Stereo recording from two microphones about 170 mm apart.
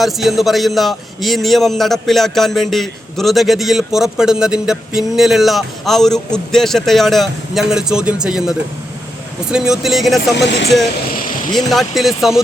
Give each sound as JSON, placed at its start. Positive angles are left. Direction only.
{"t": 0.0, "sound": "a man's voice", "side_deg": 0}
{"t": 10.3, "sound": "speech", "side_deg": 90}
{"t": 11.5, "sound": "a man's voice", "side_deg": 0}